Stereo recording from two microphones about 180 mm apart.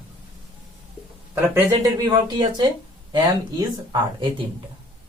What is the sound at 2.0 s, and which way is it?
Speech, 25° right (ahead or behind).